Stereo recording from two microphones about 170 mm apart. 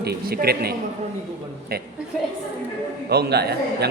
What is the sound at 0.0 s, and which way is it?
Speech, 65° right (ahead or behind).